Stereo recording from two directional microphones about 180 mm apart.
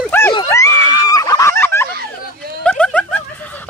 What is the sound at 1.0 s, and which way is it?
Fowl, 20° left (ahead or behind).